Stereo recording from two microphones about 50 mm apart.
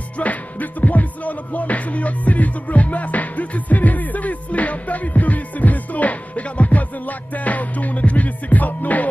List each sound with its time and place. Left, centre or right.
0.2 s music: left